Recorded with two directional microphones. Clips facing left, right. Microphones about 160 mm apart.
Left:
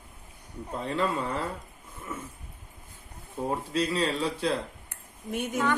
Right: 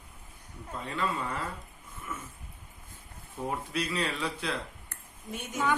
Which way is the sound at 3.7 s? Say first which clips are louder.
Left 6 dB; 30° left (ahead or behind).